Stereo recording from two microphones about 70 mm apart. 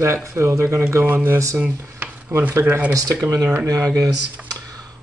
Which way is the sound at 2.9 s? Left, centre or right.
Right.